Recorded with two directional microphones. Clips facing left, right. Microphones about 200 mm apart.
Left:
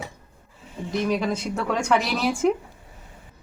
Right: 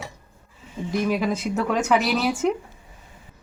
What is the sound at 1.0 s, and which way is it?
Speech, 5° right (ahead or behind).